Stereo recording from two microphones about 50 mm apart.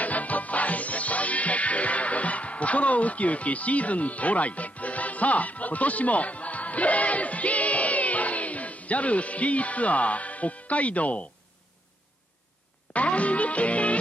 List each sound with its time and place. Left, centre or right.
0.0 s music: left
12.9 s music: left